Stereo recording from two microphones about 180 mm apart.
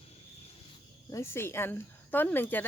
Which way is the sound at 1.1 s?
15° left (ahead or behind).